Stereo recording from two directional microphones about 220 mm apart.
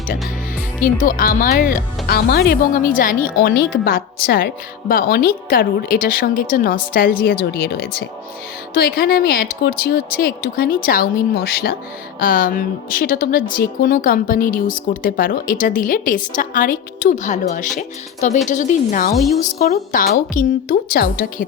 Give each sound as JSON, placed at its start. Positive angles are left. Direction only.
{"t": 0.8, "sound": "a woman's voice", "side_deg": 40}
{"t": 19.1, "sound": "a woman's voice", "side_deg": 0}
{"t": 19.4, "sound": "a woman's voice", "side_deg": 40}